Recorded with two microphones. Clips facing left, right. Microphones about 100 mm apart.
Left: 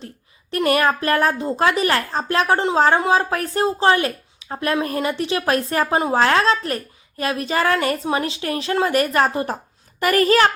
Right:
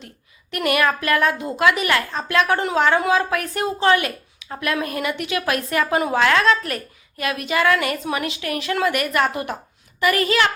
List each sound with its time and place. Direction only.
0.5 s speech: 35° left (ahead or behind)